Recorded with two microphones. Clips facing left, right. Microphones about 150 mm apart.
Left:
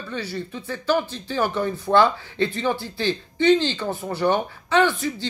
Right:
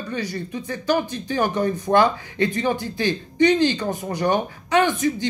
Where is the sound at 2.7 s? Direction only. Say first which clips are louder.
Right 1 dB; 15° right (ahead or behind).